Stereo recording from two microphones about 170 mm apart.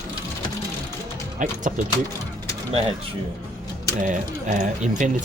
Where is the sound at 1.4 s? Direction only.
50° right (ahead or behind).